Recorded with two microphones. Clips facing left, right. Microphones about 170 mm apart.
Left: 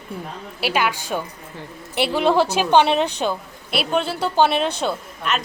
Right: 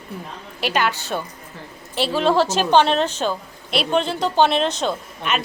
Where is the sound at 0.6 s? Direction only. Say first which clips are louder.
Even; 10° left (ahead or behind).